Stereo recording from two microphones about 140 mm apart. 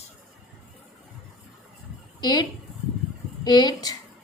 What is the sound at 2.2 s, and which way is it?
A woman's voice, 30° left (ahead or behind).